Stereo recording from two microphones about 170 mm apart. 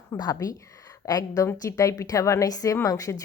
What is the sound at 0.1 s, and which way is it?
Speech, 20° left (ahead or behind).